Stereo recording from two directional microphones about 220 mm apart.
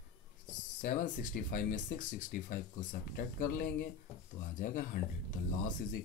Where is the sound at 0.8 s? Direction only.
35° left (ahead or behind).